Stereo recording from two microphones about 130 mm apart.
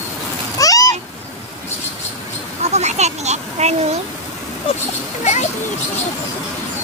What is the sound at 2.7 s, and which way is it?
A child's voice, 60° right (ahead or behind).